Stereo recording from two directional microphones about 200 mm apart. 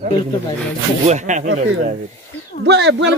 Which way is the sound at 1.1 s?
35° right (ahead or behind).